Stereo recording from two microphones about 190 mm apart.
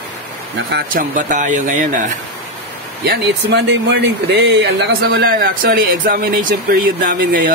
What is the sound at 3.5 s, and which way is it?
A man's voice, 65° right (ahead or behind).